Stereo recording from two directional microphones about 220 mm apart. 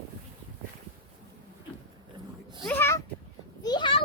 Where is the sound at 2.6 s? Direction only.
10° left (ahead or behind).